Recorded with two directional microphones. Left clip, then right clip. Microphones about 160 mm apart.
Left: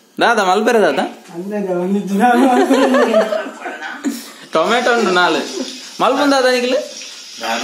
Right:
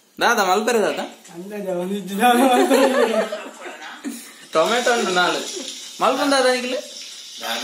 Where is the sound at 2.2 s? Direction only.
5° left (ahead or behind).